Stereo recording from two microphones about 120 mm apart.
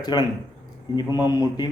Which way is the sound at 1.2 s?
35° left (ahead or behind).